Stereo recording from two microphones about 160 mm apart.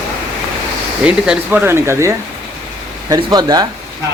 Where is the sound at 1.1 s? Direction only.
5° right (ahead or behind); by 3.6 s 25° right (ahead or behind).